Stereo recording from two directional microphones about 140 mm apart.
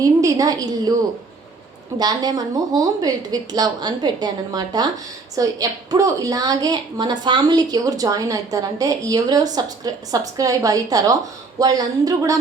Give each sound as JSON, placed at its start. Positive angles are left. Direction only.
{"t": 0.0, "sound": "a woman's voice", "side_deg": -25}
{"t": 2.0, "sound": "a woman's voice", "side_deg": -30}